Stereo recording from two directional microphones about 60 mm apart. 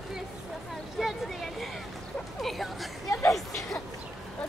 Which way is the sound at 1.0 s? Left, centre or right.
Centre.